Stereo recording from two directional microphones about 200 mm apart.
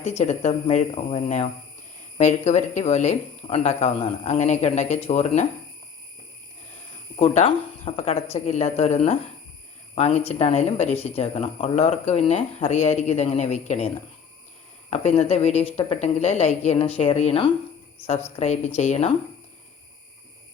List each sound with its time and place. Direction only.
0.0 s speech: 35° left (ahead or behind)
7.2 s speech: 30° left (ahead or behind)